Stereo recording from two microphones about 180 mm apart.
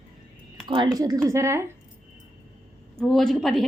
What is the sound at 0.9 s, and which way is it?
Speech, 20° right (ahead or behind).